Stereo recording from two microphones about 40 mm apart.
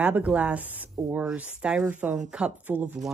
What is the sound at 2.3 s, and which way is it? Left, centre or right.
Speech, right.